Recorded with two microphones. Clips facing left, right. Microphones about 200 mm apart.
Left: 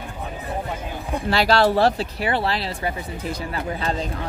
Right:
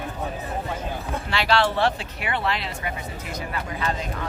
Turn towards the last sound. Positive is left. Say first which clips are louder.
# left 3 dB
turn(degrees=30)  # may be behind; listen again after turning